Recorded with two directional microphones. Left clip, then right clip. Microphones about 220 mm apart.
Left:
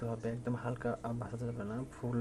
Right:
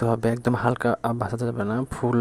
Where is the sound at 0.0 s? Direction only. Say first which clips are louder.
Right 16 dB; 45° right (ahead or behind).